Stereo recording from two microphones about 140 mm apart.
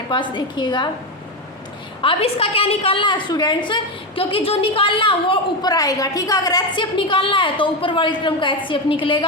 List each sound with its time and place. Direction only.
0.1 s a woman's voice: 35° left (ahead or behind)
2.0 s a woman's voice: 40° left (ahead or behind)